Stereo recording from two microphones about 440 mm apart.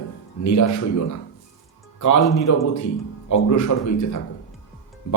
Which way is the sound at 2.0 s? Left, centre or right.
Left.